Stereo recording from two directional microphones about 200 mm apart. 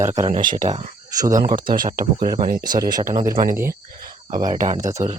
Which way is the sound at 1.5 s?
45° right (ahead or behind).